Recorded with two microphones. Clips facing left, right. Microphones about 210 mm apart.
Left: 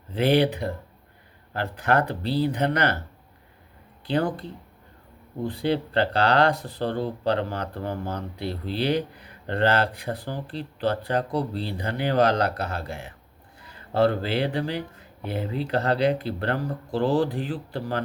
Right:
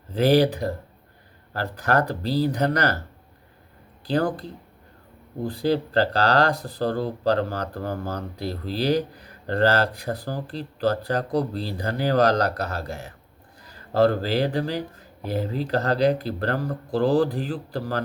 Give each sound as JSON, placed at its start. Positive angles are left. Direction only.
{"t": 0.1, "sound": "speech", "side_deg": -40}
{"t": 4.0, "sound": "speech", "side_deg": -35}